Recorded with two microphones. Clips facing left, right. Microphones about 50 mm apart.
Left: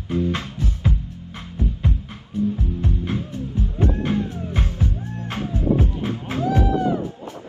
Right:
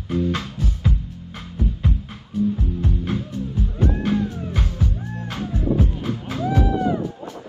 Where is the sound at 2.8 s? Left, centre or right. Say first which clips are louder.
Right 1 dB; left.